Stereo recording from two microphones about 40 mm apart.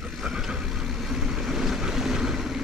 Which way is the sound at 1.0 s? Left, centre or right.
Centre.